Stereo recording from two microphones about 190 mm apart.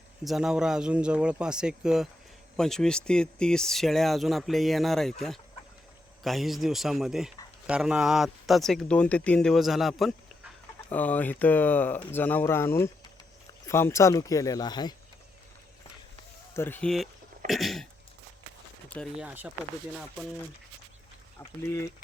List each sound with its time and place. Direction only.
0.3 s speech: centre (ahead or behind)
6.2 s speech: centre (ahead or behind); by 14.9 s 20° left (ahead or behind)
16.6 s speech: 10° left (ahead or behind)
18.9 s speech: 5° left (ahead or behind)
19.2 s speech: 10° right (ahead or behind)
21.3 s speech: 15° left (ahead or behind)